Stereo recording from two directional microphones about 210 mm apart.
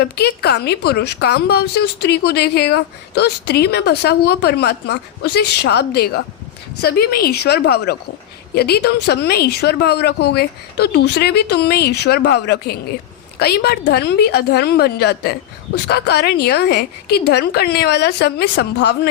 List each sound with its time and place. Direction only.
0.0 s a woman's voice: 50° left (ahead or behind)